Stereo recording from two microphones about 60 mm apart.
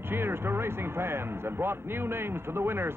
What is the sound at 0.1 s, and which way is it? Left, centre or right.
A man's voice, right.